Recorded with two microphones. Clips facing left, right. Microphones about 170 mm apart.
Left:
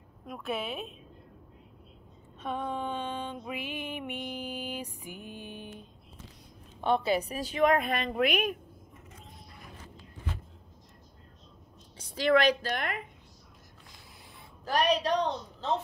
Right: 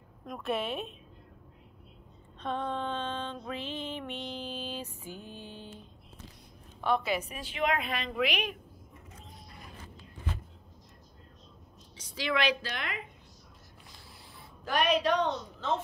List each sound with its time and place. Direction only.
0.2 s a woman's voice: 5° left (ahead or behind)
2.4 s mantra: 10° left (ahead or behind)
6.8 s a woman's voice: 30° left (ahead or behind); by 8.5 s 50° left (ahead or behind)
12.0 s a woman's voice: 50° left (ahead or behind)
14.6 s a woman's voice: 35° left (ahead or behind)